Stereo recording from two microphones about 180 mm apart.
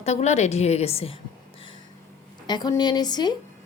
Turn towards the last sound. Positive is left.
turn(degrees=25)  # may be behind; listen again after turning